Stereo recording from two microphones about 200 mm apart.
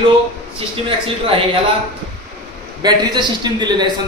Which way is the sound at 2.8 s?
20° right (ahead or behind).